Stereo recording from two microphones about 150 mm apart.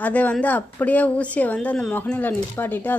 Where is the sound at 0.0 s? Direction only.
10° left (ahead or behind).